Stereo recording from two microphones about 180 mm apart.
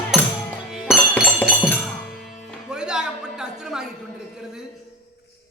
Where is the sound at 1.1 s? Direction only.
10° left (ahead or behind).